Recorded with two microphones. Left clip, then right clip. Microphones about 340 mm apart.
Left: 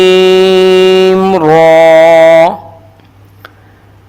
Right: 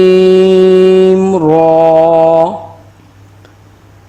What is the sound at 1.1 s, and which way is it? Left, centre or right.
Music, left.